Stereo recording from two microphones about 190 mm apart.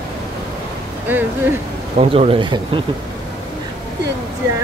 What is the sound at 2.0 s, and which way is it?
Speech, 30° right (ahead or behind).